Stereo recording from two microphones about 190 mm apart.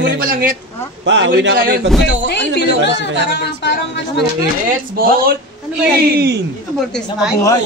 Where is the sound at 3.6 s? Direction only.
65° left (ahead or behind).